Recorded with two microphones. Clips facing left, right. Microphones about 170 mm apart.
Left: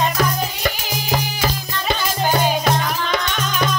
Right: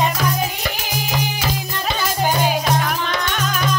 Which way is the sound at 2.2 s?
5° right (ahead or behind).